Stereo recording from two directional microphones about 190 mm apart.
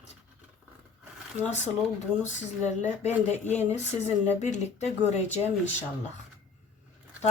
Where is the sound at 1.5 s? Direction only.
35° left (ahead or behind).